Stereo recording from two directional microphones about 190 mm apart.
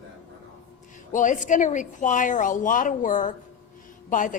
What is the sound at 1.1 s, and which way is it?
A woman's voice, 40° left (ahead or behind).